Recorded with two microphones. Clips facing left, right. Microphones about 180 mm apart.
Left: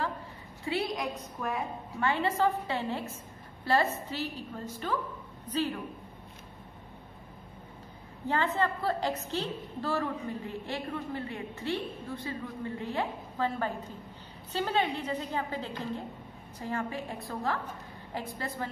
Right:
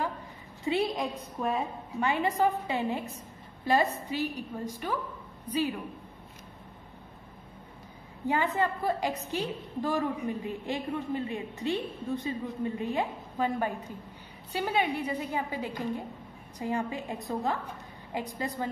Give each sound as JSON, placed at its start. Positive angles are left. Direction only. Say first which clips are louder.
{"t": 0.7, "sound": "a woman's voice", "louder": "right 3 dB", "side_deg": -25}
{"t": 8.3, "sound": "a woman's voice", "louder": "right 1 dB", "side_deg": -15}